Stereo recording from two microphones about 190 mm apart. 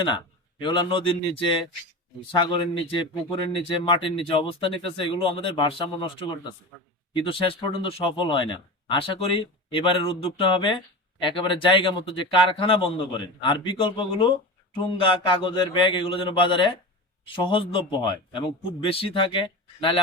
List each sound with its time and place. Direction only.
0.6 s speech: 25° left (ahead or behind)